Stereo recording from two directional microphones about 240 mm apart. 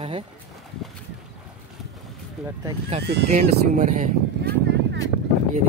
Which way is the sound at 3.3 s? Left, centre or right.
Right.